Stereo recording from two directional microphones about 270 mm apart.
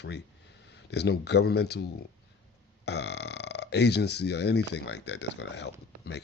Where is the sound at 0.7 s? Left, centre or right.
Left.